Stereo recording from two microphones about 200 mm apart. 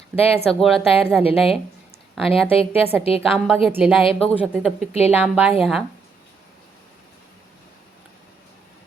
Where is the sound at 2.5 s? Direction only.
30° left (ahead or behind).